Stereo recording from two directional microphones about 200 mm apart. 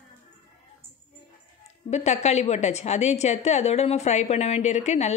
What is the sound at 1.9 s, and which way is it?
A woman's voice, 35° left (ahead or behind).